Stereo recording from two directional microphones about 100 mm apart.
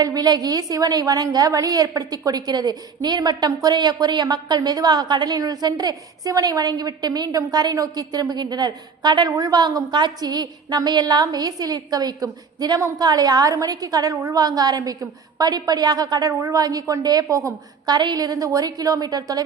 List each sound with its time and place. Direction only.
0.0 s a woman's voice: 40° right (ahead or behind)
17.9 s a woman's voice: 45° right (ahead or behind)